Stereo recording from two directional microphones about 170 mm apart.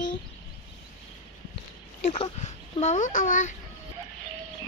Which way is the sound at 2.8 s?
45° left (ahead or behind).